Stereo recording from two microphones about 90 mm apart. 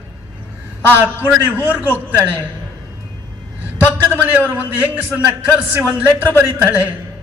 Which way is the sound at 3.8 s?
20° right (ahead or behind).